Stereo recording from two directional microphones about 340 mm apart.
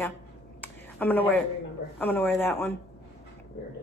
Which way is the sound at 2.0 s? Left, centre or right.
Centre.